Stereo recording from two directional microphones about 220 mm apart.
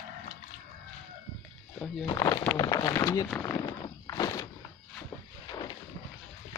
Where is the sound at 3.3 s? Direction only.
10° left (ahead or behind).